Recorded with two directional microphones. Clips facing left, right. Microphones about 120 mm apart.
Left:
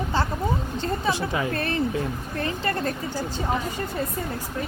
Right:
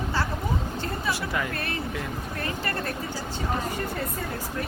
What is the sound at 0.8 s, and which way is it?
Speech, 20° left (ahead or behind).